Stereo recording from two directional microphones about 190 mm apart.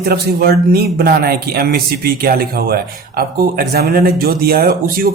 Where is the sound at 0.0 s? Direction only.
55° right (ahead or behind).